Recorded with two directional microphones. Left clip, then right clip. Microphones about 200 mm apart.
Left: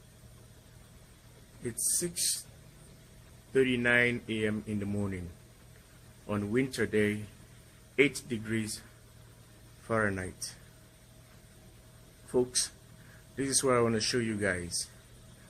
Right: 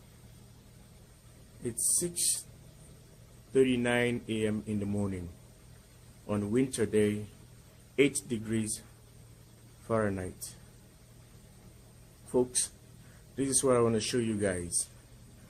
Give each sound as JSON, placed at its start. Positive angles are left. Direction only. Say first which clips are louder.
{"t": 1.6, "sound": "speech", "louder": "right 1 dB", "side_deg": -10}
{"t": 3.5, "sound": "speech", "louder": "left 1 dB", "side_deg": -10}
{"t": 6.2, "sound": "speech", "louder": "right 1 dB", "side_deg": -10}
{"t": 9.8, "sound": "speech", "louder": "left 1 dB", "side_deg": -10}
{"t": 12.3, "sound": "speech", "louder": "even", "side_deg": -10}